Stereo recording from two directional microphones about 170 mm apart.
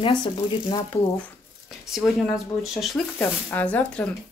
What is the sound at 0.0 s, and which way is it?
Speech, 30° left (ahead or behind).